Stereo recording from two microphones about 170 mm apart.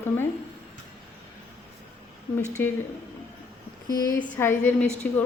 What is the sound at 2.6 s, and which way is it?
Speech, 10° left (ahead or behind).